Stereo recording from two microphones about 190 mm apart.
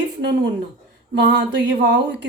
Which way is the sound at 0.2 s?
65° right (ahead or behind).